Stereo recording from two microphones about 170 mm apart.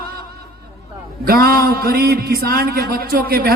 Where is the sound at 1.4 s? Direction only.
65° right (ahead or behind).